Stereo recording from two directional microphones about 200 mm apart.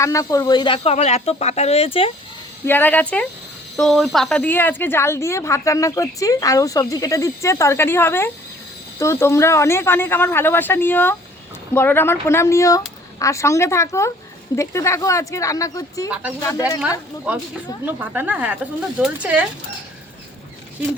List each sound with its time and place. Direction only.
0.0 s speech: 15° left (ahead or behind)
2.6 s speech: 10° left (ahead or behind)
17.8 s a woman's voice: 10° right (ahead or behind)